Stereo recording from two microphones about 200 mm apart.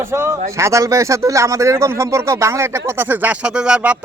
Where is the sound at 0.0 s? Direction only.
15° right (ahead or behind).